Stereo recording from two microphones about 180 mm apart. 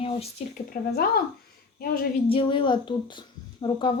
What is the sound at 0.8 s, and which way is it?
Speech, 55° left (ahead or behind).